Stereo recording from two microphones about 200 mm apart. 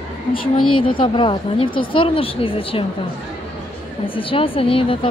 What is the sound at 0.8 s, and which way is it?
Speech, 25° left (ahead or behind).